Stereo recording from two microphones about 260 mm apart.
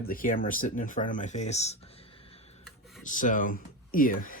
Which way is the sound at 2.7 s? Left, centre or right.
Centre.